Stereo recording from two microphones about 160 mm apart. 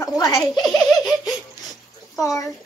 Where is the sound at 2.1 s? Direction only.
20° left (ahead or behind).